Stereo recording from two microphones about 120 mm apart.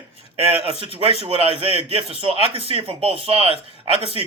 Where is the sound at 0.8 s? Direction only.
55° right (ahead or behind).